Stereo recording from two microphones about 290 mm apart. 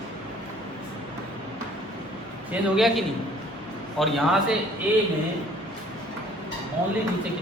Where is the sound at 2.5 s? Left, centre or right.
Centre.